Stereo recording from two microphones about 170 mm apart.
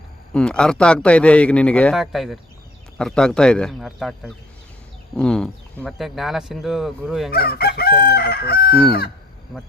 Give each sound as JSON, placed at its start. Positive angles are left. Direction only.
{"t": 0.3, "sound": "speech", "side_deg": 5}
{"t": 7.3, "sound": "crowing", "side_deg": 65}